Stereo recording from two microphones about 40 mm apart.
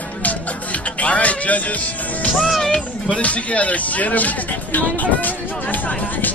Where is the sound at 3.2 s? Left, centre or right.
Left.